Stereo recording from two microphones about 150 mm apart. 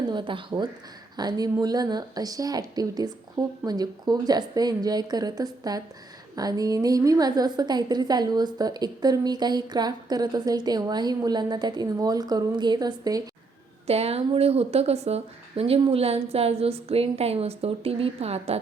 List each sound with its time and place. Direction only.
0.1 s a woman's voice: 30° right (ahead or behind)
13.8 s speech: 45° right (ahead or behind)